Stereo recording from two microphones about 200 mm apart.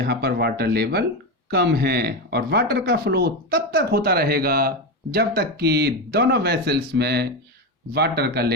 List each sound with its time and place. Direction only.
0.0 s speech: 50° right (ahead or behind)